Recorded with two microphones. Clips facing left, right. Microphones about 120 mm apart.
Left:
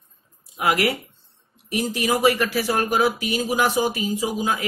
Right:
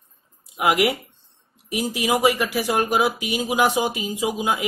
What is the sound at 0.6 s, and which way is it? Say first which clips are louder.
Speech: right 2 dB; 15° right (ahead or behind).